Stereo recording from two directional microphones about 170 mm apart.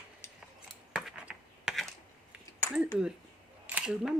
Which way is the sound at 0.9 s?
5° right (ahead or behind).